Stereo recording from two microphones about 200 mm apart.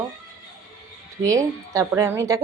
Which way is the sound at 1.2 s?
15° right (ahead or behind).